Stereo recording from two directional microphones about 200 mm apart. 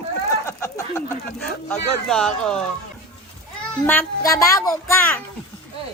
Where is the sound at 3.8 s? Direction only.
15° left (ahead or behind).